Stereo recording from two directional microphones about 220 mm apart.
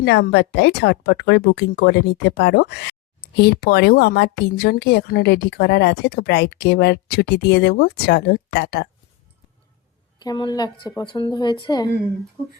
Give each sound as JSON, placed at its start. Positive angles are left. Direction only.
{"t": 0.0, "sound": "speech", "side_deg": 50}
{"t": 10.2, "sound": "speech", "side_deg": 20}